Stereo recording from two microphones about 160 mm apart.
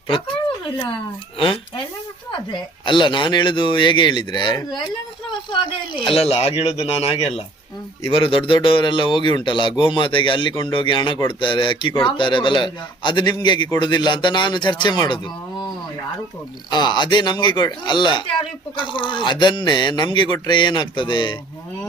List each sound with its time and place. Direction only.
2.3 s a man's voice: 30° left (ahead or behind)
16.6 s speech: 25° left (ahead or behind)